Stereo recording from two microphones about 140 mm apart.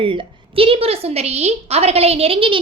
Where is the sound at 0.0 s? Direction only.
40° right (ahead or behind).